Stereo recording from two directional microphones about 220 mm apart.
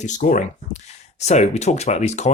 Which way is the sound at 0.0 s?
35° left (ahead or behind).